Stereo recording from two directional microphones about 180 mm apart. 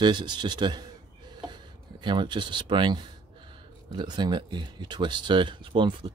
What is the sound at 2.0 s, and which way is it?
Speech, 25° right (ahead or behind).